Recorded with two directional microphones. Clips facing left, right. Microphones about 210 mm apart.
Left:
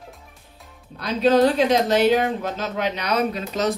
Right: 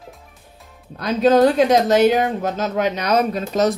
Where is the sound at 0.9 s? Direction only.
45° right (ahead or behind).